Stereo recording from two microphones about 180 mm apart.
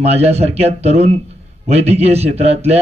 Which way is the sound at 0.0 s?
35° right (ahead or behind).